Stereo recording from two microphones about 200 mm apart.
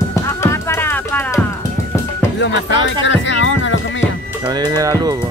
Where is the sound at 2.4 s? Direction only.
65° left (ahead or behind).